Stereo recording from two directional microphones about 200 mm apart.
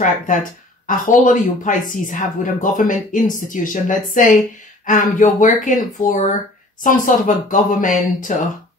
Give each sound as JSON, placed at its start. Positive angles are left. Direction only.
{"t": 0.0, "sound": "speech", "side_deg": 40}